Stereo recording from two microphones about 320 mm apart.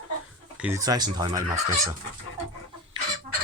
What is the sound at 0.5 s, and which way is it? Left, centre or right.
Speech, centre.